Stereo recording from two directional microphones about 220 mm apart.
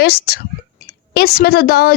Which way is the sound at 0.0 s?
45° left (ahead or behind).